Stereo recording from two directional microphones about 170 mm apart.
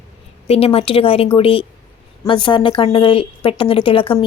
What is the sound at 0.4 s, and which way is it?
A woman's voice, 35° left (ahead or behind).